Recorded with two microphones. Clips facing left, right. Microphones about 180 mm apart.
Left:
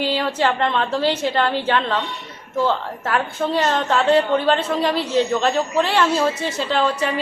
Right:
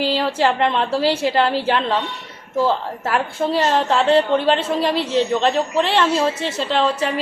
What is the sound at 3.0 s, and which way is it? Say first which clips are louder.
A woman's voice: right 1 dB; 5° right (ahead or behind).